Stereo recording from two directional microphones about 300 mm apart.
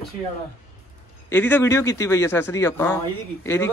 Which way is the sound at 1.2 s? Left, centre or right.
Centre.